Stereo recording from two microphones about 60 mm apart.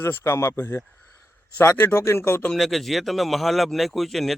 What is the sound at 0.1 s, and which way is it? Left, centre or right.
Speech, left.